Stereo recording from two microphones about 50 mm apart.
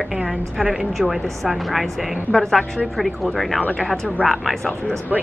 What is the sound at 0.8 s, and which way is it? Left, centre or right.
A woman's voice, centre.